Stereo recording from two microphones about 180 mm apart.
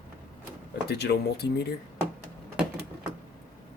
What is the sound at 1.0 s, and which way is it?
Speech, 65° left (ahead or behind).